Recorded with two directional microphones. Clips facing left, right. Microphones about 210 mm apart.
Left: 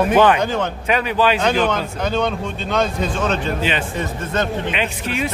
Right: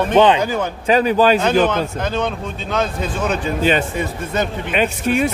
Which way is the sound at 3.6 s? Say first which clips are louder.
Right 5 dB; 40° right (ahead or behind).